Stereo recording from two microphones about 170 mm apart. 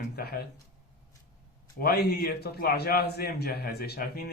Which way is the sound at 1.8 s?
65° left (ahead or behind).